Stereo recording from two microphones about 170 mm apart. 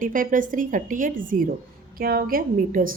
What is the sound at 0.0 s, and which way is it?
A woman's voice, 50° right (ahead or behind).